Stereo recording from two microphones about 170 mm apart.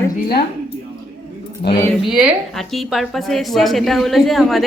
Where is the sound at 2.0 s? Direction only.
5° right (ahead or behind).